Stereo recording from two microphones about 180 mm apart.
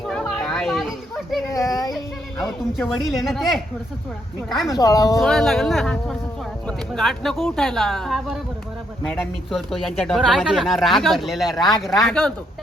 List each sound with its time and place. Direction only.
0.0 s a sound: 5° left (ahead or behind)
1.5 s children playing: 20° left (ahead or behind)
2.4 s speech: centre (ahead or behind)
4.7 s speech: 20° left (ahead or behind)
5.2 s speech: centre (ahead or behind)
9.5 s speech: centre (ahead or behind)